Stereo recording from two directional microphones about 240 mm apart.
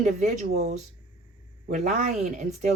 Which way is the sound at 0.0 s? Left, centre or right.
Right.